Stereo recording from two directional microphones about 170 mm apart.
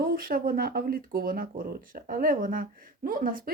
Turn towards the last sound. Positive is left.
turn(degrees=-55)  # may be behind; listen again after turning